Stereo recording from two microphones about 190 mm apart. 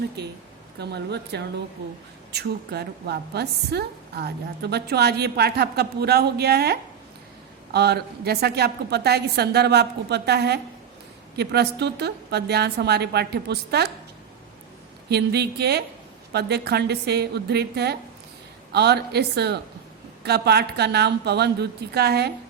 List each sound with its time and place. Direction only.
0.8 s a woman's voice: 60° right (ahead or behind)
15.1 s a woman's voice: 60° right (ahead or behind)